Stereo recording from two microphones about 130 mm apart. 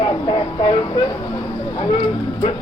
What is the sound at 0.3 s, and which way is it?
Vehicle, 40° left (ahead or behind).